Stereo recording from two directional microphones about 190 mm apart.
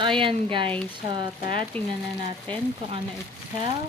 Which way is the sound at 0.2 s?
25° right (ahead or behind).